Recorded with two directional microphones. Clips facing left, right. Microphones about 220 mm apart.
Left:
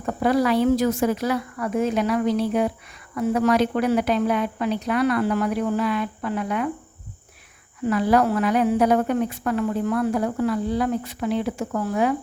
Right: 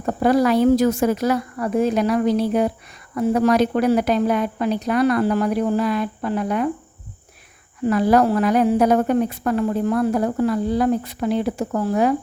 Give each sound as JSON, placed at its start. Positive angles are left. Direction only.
{"t": 0.0, "sound": "speech", "side_deg": -40}
{"t": 7.9, "sound": "speech", "side_deg": -40}